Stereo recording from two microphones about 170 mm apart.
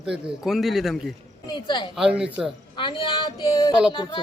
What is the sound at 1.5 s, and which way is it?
Speech, 25° left (ahead or behind).